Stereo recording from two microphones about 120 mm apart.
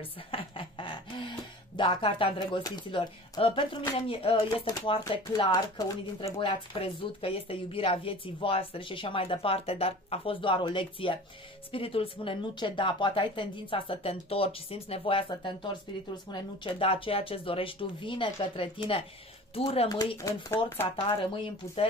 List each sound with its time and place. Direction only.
0.3 s a sound: 45° left (ahead or behind)
1.8 s a woman's voice: 40° left (ahead or behind)
4.6 s speech: 35° left (ahead or behind)
6.4 s a woman's voice: 45° left (ahead or behind)
20.4 s speech: 20° left (ahead or behind)
20.9 s a woman's voice: 45° left (ahead or behind)